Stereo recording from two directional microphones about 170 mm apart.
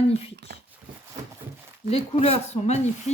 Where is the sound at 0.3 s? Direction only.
75° right (ahead or behind).